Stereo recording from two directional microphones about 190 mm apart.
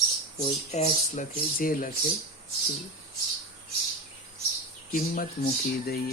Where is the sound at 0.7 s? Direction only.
35° left (ahead or behind).